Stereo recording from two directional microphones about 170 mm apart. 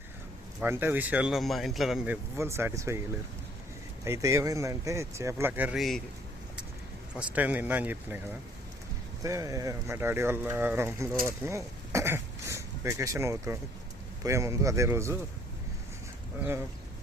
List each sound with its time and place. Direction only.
0.6 s speech: 10° right (ahead or behind)
2.3 s speech: 15° right (ahead or behind)
4.0 s speech: 15° right (ahead or behind); by 6.0 s centre (ahead or behind)
7.2 s speech: 10° right (ahead or behind)
9.2 s speech: 20° right (ahead or behind)